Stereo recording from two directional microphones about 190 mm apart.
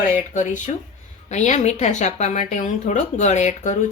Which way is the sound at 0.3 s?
40° left (ahead or behind).